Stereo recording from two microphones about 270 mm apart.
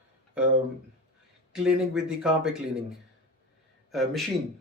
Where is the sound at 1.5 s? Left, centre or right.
Centre.